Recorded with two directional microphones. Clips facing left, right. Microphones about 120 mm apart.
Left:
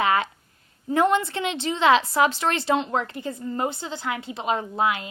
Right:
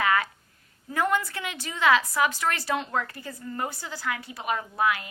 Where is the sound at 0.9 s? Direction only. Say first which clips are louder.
Left 6 dB; 25° left (ahead or behind).